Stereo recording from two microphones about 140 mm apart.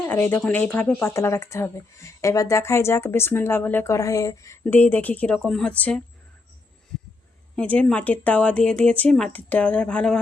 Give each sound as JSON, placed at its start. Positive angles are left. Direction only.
{"t": 0.0, "sound": "speech", "side_deg": 15}
{"t": 4.6, "sound": "speech", "side_deg": 10}
{"t": 7.5, "sound": "speech", "side_deg": 10}